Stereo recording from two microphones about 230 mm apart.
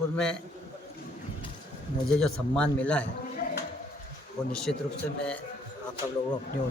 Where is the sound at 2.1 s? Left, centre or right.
Centre.